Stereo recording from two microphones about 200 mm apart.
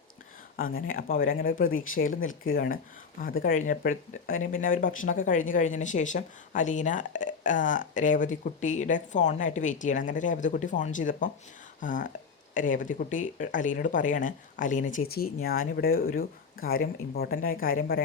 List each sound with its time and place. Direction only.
0.5 s speech: 50° left (ahead or behind)